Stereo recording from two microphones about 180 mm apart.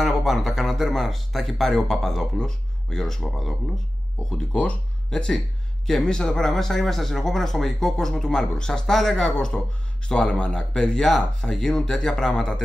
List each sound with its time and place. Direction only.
0.0 s speech: centre (ahead or behind)